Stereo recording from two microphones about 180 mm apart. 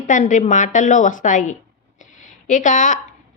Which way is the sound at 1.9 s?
45° left (ahead or behind).